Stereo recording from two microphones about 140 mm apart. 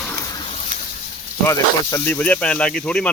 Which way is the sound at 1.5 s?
15° left (ahead or behind).